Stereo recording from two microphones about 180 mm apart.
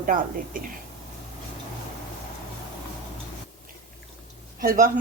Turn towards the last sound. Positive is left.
turn(degrees=-55)  # may be behind; listen again after turning